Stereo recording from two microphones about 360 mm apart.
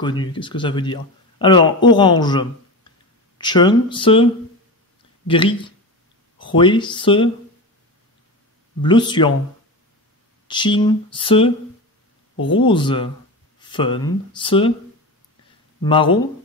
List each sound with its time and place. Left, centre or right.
0.0 s a man's voice: centre
8.8 s a man's voice: centre
10.5 s a man's voice: centre
12.4 s speech: left
12.6 s a man's voice: centre
15.8 s a man's voice: centre